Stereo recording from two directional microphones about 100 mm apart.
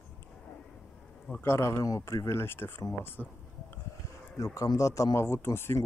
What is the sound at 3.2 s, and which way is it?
Speech, 10° left (ahead or behind).